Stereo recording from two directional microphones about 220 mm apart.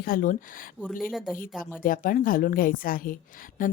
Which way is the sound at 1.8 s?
40° left (ahead or behind).